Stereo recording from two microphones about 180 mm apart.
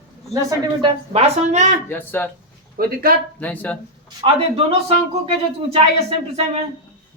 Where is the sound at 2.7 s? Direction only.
55° right (ahead or behind).